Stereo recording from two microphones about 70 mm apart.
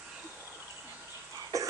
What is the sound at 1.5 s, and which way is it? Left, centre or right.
Cough, right.